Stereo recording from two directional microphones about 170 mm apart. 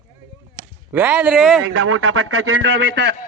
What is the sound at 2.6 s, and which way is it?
Speech, 90° right.